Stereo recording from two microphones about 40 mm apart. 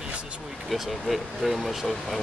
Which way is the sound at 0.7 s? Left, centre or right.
Centre.